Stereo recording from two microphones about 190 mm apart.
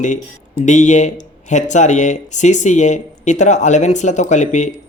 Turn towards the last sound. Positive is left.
turn(degrees=40)  # may be behind; listen again after turning